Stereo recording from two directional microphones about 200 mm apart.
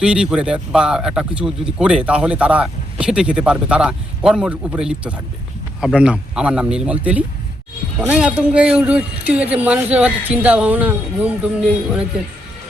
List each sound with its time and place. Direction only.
0.0 s speech: 5° right (ahead or behind)